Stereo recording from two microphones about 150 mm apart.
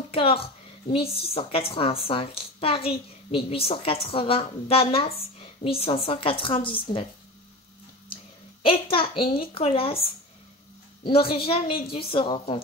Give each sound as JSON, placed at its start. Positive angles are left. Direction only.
{"t": 0.1, "sound": "a woman's voice", "side_deg": 40}
{"t": 8.6, "sound": "a woman's voice", "side_deg": 35}
{"t": 11.1, "sound": "a woman's voice", "side_deg": 35}